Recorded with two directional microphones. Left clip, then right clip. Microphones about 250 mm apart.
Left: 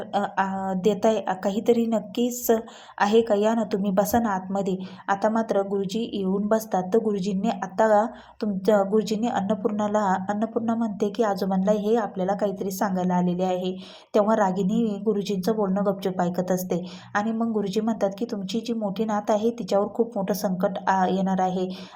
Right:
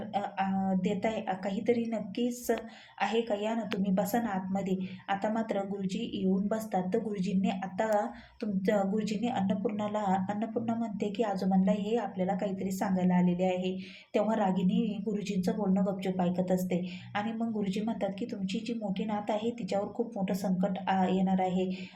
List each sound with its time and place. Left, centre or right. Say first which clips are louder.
0.1 s a woman's voice: left 8 dB; left